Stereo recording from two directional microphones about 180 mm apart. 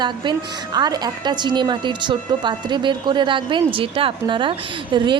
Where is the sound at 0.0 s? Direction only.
25° right (ahead or behind).